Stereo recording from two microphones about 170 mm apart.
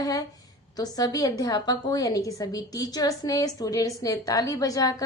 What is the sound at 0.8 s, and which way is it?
A woman's voice, 20° left (ahead or behind).